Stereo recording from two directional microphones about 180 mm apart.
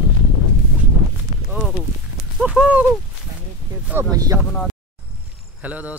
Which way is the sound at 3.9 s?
20° right (ahead or behind).